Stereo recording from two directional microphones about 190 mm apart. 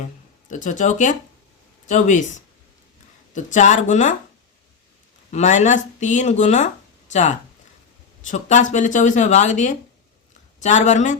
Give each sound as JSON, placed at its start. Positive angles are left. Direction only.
{"t": 0.4, "sound": "speech", "side_deg": 40}
{"t": 3.3, "sound": "speech", "side_deg": 40}
{"t": 5.3, "sound": "speech", "side_deg": 40}